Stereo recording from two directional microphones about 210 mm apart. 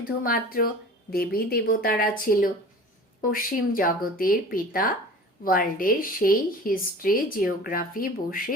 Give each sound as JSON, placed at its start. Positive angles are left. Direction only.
{"t": 0.0, "sound": "speech", "side_deg": 40}